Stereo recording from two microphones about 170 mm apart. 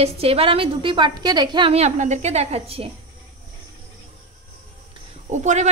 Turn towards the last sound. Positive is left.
turn(degrees=-45)  # may be behind; listen again after turning